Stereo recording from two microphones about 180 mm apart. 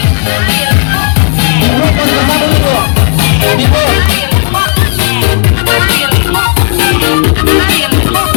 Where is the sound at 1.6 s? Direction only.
55° left (ahead or behind).